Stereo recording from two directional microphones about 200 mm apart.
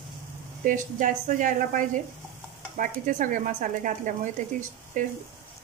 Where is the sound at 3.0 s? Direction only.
40° right (ahead or behind).